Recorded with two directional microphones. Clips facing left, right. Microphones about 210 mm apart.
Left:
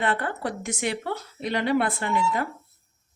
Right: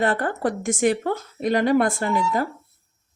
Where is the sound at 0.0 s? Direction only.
40° right (ahead or behind).